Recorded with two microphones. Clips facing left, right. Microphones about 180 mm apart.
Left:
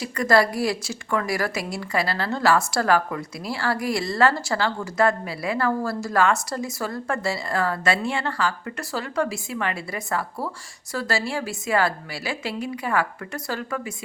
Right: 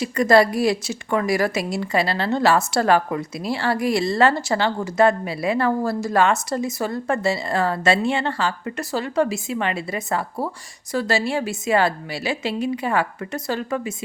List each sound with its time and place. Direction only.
0.0 s a woman's voice: 20° right (ahead or behind)